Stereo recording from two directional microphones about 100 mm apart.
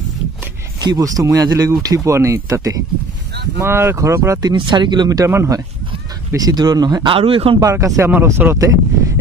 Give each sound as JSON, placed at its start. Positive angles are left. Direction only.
{"t": 0.7, "sound": "speech", "side_deg": -40}
{"t": 4.6, "sound": "speech", "side_deg": -50}
{"t": 5.2, "sound": "speech", "side_deg": -30}
{"t": 6.3, "sound": "speech", "side_deg": -40}
{"t": 7.1, "sound": "a man's voice", "side_deg": -70}
{"t": 7.7, "sound": "speech", "side_deg": -30}